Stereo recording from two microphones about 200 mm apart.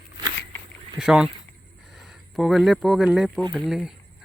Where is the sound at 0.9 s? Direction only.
5° right (ahead or behind).